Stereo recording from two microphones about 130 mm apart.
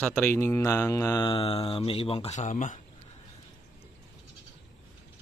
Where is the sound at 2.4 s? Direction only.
75° left (ahead or behind).